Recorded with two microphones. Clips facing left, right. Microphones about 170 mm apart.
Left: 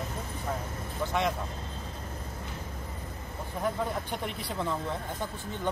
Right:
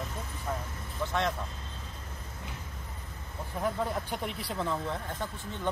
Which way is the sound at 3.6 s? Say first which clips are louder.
Even; centre (ahead or behind).